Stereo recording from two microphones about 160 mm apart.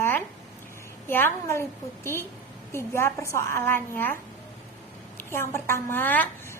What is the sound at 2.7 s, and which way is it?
A woman's voice, 15° left (ahead or behind).